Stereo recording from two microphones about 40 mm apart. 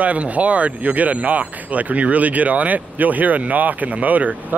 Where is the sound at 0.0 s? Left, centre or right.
Right.